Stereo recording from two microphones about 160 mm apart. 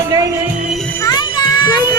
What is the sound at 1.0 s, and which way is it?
Music, 25° left (ahead or behind).